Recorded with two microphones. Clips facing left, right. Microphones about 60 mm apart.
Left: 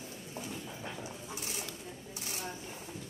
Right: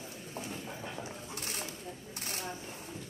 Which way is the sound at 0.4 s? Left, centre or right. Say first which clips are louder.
Right 1 dB; right.